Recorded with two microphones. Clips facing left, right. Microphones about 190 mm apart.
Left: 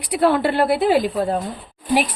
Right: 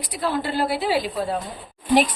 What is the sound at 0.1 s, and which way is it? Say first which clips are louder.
Speech: left 8 dB; 65° left (ahead or behind).